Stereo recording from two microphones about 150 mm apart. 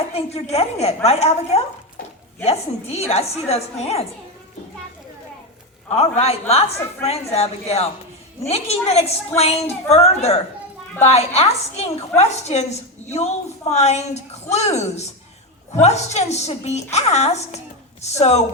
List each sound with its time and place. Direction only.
0.1 s a woman's voice: 40° left (ahead or behind)
5.9 s a man's voice: 40° left (ahead or behind)